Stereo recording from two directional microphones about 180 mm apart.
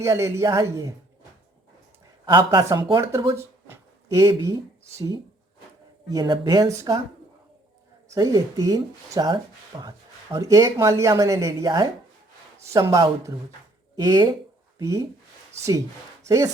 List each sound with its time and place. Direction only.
0.0 s speech: 15° right (ahead or behind)
2.2 s speech: 20° right (ahead or behind)
8.1 s speech: 20° right (ahead or behind)
16.2 s speech: 20° right (ahead or behind)